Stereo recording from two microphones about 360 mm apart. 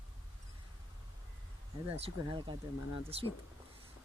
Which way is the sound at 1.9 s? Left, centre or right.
Centre.